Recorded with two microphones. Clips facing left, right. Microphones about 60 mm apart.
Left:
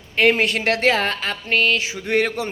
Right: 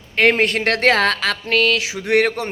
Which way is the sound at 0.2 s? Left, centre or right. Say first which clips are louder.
Right 2 dB; right.